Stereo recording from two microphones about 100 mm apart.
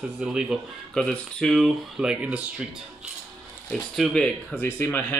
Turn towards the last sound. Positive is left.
turn(degrees=20)  # may be behind; listen again after turning